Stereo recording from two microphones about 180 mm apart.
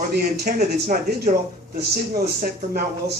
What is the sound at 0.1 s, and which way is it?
Speech, 60° right (ahead or behind).